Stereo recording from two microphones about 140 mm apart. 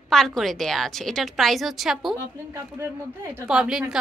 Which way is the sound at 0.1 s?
5° left (ahead or behind).